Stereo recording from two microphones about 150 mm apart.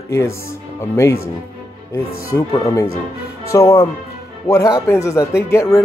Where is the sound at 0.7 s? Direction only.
20° left (ahead or behind).